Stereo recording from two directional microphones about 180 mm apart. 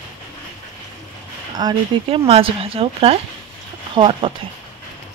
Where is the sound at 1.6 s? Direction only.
25° right (ahead or behind).